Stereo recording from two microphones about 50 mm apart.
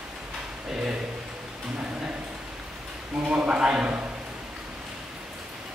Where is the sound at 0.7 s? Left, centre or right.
Centre.